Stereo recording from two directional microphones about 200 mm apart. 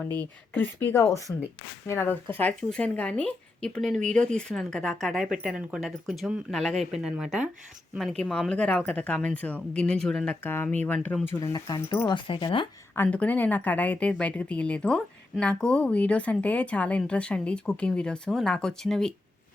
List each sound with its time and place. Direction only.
0.5 s a woman's voice: 10° left (ahead or behind)
11.3 s speech: 20° left (ahead or behind)
13.0 s a woman's voice: 5° left (ahead or behind)